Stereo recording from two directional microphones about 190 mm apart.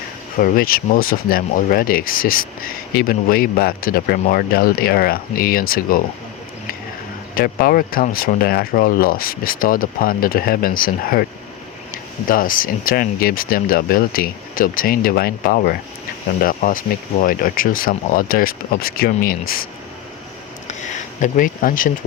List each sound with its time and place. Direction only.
0.3 s speech: 50° left (ahead or behind)
7.3 s speech: 50° left (ahead or behind)
12.3 s speech: 45° left (ahead or behind)
20.7 s a sound: 40° left (ahead or behind)